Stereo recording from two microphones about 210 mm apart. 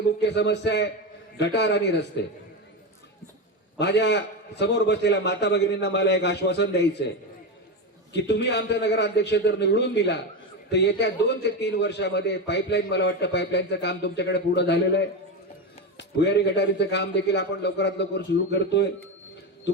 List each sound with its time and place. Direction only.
0.0 s a man's voice: 55° left (ahead or behind)
3.8 s a man's voice: 55° left (ahead or behind)
8.1 s a man's voice: 55° left (ahead or behind)